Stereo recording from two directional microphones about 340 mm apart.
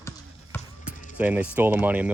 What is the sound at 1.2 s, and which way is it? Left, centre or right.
Speech, centre.